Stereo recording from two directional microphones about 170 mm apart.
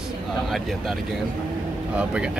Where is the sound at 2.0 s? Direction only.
5° right (ahead or behind).